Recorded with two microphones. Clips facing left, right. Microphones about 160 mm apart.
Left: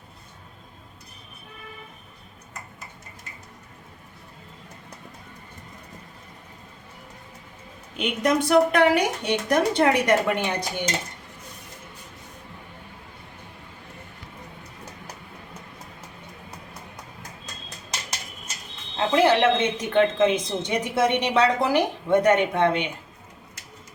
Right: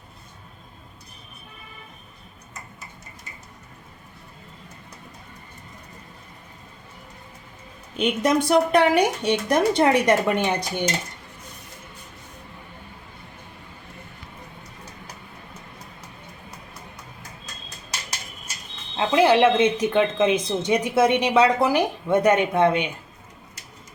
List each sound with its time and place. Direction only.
7.9 s speech: 20° right (ahead or behind)
18.9 s a woman's voice: 10° right (ahead or behind)